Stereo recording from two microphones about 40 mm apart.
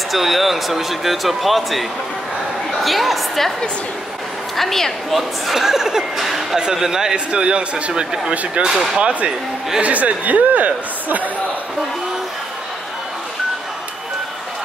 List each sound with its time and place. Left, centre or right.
0.1 s a woman's voice: centre
4.6 s a woman's voice: centre
5.1 s a man's voice: centre; by 11.2 s right